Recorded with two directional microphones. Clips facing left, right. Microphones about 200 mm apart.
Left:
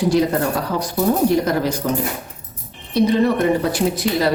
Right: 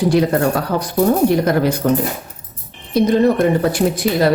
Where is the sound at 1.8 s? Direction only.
60° right (ahead or behind).